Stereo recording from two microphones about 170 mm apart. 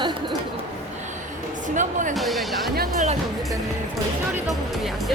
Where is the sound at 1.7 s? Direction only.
50° right (ahead or behind).